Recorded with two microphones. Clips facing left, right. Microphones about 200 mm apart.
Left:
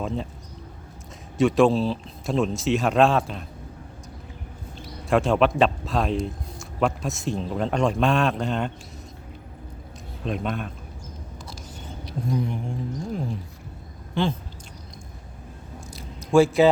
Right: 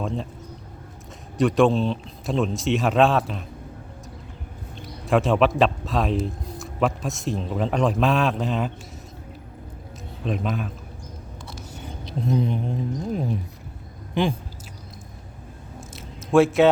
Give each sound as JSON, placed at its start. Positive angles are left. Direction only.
{"t": 0.0, "sound": "speech", "side_deg": 0}
{"t": 1.4, "sound": "a man's voice", "side_deg": 0}
{"t": 5.0, "sound": "a man's voice", "side_deg": 0}
{"t": 10.2, "sound": "a man's voice", "side_deg": 0}
{"t": 12.0, "sound": "speech", "side_deg": -20}
{"t": 16.0, "sound": "squish", "side_deg": 0}